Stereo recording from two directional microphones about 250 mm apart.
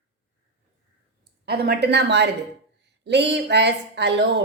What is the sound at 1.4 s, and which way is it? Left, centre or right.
A woman's voice, right.